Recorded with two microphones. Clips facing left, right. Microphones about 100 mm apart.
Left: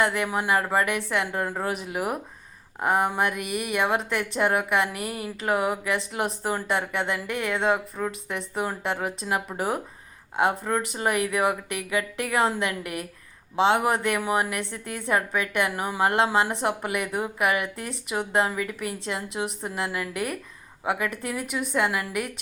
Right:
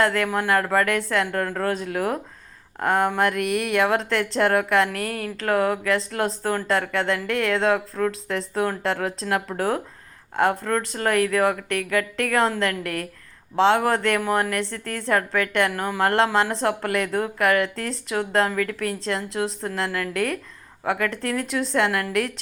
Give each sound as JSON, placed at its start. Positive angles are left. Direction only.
{"t": 0.0, "sound": "speech", "side_deg": 15}